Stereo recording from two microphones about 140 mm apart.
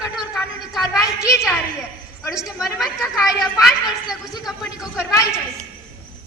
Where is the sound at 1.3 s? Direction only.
20° left (ahead or behind).